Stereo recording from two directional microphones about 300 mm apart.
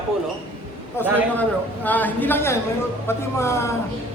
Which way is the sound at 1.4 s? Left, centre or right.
Centre.